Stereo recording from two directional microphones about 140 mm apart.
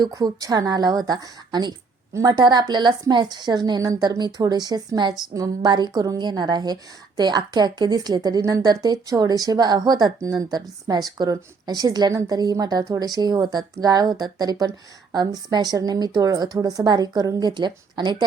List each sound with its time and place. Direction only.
0.0 s a woman's voice: 25° right (ahead or behind)